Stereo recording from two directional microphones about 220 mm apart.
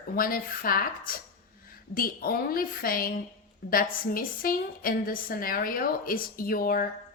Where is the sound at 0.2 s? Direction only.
40° left (ahead or behind).